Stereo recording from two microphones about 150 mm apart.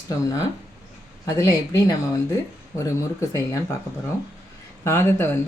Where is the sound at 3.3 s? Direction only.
20° left (ahead or behind).